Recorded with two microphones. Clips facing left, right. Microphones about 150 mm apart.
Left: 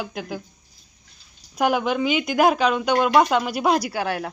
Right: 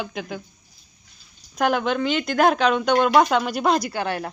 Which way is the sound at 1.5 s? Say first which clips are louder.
Even; 10° left (ahead or behind).